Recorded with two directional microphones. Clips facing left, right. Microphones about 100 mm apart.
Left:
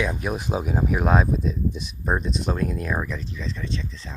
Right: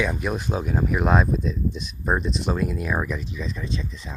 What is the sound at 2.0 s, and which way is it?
Speech, centre (ahead or behind).